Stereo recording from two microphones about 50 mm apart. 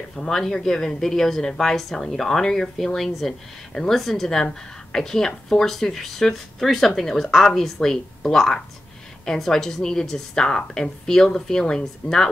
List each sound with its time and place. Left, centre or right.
0.1 s a woman's voice: centre